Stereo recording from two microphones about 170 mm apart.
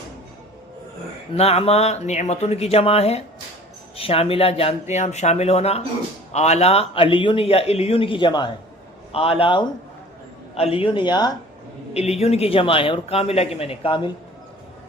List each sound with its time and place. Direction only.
1.3 s a man's voice: 35° left (ahead or behind)
11.9 s a man's voice: 40° left (ahead or behind)